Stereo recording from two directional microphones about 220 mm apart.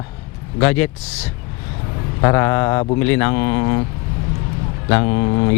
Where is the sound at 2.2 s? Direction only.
15° left (ahead or behind).